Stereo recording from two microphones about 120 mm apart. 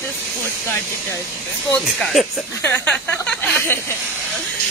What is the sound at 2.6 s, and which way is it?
Speech, 20° left (ahead or behind).